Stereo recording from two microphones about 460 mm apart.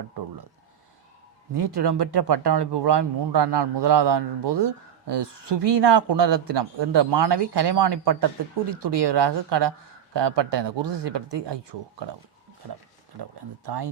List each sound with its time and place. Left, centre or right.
1.5 s speech: right
13.7 s speech: right